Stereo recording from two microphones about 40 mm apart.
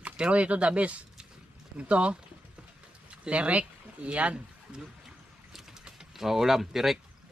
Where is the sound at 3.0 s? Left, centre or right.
Right.